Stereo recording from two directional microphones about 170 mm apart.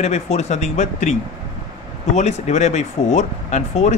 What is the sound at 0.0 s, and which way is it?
Speech, 40° left (ahead or behind).